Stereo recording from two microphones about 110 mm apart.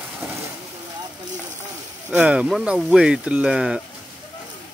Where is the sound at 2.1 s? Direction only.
10° right (ahead or behind).